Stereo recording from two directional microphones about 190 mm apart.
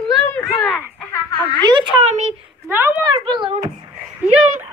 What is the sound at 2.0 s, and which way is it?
Speech, 35° right (ahead or behind).